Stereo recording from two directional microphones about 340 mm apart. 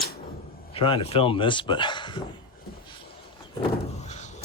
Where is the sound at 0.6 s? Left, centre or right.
Centre.